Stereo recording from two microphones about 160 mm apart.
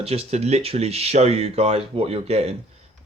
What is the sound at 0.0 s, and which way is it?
Speech, 40° right (ahead or behind).